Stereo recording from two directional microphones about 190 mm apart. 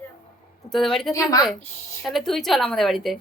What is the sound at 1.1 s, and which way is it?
Speech, 20° left (ahead or behind).